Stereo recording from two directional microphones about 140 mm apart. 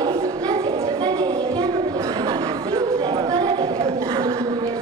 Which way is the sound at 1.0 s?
30° right (ahead or behind).